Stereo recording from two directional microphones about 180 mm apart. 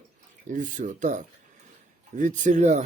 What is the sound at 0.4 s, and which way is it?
Speech, 45° right (ahead or behind).